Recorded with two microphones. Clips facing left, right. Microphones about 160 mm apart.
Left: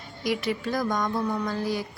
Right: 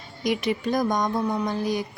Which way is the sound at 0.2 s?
20° right (ahead or behind).